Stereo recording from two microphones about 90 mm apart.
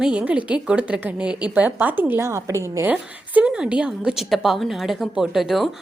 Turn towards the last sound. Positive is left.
turn(degrees=0)  # may be behind; listen again after turning